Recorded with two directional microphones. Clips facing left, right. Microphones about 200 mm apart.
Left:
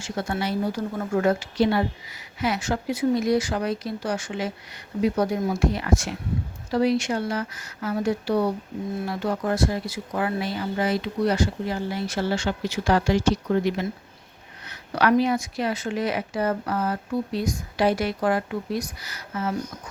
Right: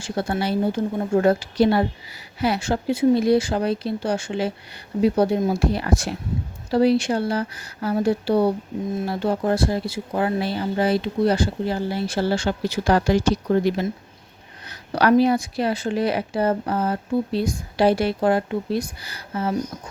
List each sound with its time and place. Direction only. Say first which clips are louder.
0.0 s speech: right 3 dB; 30° right (ahead or behind)
14.7 s a sound: right 3 dB; 35° right (ahead or behind)
15.2 s speech: right 4 dB; 35° right (ahead or behind)